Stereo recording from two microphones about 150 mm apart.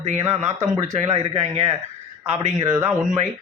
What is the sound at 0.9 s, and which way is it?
A man's voice, 45° right (ahead or behind).